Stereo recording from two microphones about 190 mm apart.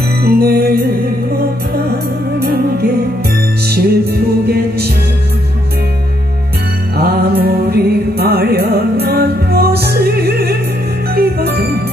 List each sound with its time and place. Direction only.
0.2 s music: 55° right (ahead or behind)
3.6 s music: 55° right (ahead or behind)
7.0 s music: 55° right (ahead or behind)